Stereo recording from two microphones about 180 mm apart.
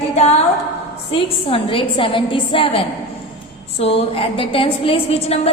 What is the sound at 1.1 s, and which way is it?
A woman's voice, 30° left (ahead or behind).